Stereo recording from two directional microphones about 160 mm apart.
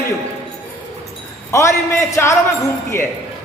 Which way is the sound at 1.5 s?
20° left (ahead or behind).